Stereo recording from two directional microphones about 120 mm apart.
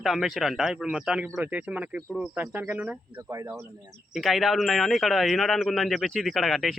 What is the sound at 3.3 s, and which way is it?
Speech, 25° right (ahead or behind).